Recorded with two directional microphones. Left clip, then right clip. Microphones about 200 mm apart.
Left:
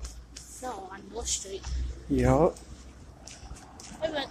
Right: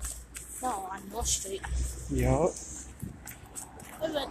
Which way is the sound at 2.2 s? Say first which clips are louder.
Left 4 dB; 35° left (ahead or behind).